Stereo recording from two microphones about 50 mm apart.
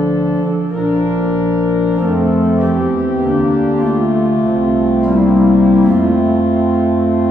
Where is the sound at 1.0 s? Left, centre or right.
Right.